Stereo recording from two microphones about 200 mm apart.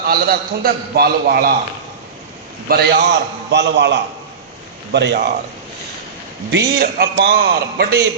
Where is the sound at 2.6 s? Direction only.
50° right (ahead or behind).